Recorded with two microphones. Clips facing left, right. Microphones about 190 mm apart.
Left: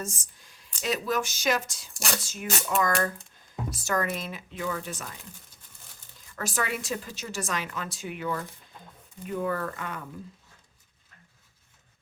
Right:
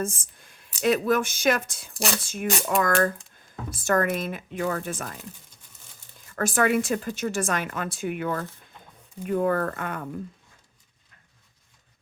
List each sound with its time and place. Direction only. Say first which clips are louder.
0.0 s a sound: right 7 dB; 55° right (ahead or behind)
0.8 s speech: right 6 dB; 55° right (ahead or behind)
1.9 s speech: right 6 dB; centre (ahead or behind)
2.2 s a woman's voice: right 5 dB; 55° right (ahead or behind)
6.3 s a woman's voice: right 9 dB; 55° right (ahead or behind)